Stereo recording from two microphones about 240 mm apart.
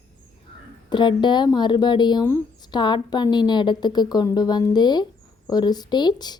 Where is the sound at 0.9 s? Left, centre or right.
Centre.